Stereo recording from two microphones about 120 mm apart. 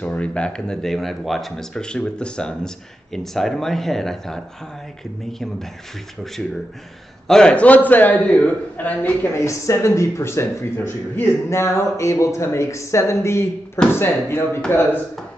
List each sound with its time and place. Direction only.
0.0 s speech: 10° left (ahead or behind)
7.2 s speech: 5° left (ahead or behind)
9.5 s speech: 25° left (ahead or behind)